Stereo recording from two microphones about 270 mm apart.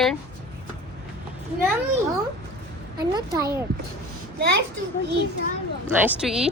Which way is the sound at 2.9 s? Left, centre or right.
Centre.